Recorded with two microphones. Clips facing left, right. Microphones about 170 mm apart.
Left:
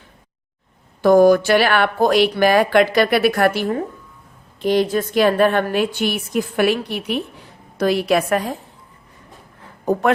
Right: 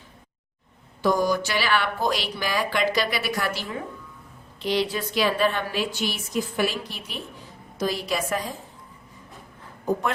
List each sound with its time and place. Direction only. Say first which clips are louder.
1.0 s a woman's voice: left 11 dB; 60° left (ahead or behind)